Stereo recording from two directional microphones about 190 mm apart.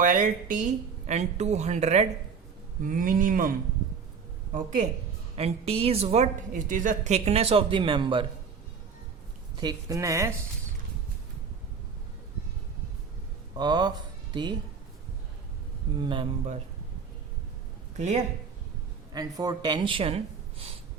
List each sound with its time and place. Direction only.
0.0 s a woman's voice: 45° right (ahead or behind)
4.5 s a woman's voice: 40° right (ahead or behind); by 8.3 s 25° right (ahead or behind)
9.6 s speech: 20° right (ahead or behind)
13.6 s speech: 20° right (ahead or behind)
16.0 s speech: 25° right (ahead or behind)
17.9 s speech: 35° right (ahead or behind)
19.1 s speech: 20° right (ahead or behind)